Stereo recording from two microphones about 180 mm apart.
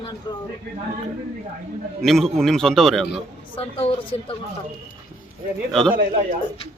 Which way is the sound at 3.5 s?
30° left (ahead or behind).